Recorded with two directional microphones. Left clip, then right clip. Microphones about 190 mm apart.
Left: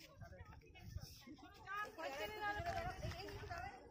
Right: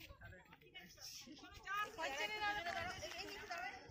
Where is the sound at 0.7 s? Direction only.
45° left (ahead or behind).